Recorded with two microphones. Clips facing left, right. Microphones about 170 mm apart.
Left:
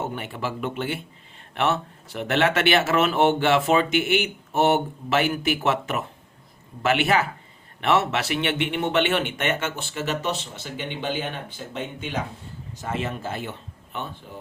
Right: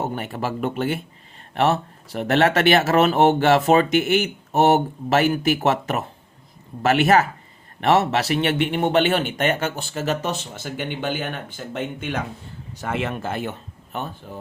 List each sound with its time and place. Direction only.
0.0 s speech: 40° right (ahead or behind); by 12.2 s 55° right (ahead or behind)
12.7 s speech: 70° right (ahead or behind); by 14.1 s 45° right (ahead or behind)